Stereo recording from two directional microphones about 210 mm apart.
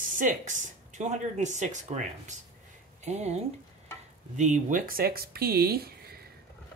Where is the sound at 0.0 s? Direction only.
40° right (ahead or behind).